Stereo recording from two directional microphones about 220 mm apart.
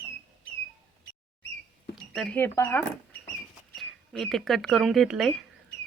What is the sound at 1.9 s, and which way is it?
Speech, centre (ahead or behind).